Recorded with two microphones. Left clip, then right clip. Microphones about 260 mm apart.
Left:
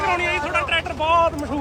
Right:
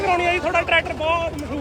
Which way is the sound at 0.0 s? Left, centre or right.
Centre.